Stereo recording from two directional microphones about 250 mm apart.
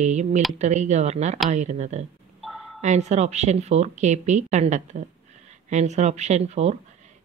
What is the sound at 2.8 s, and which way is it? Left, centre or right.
Speech, right.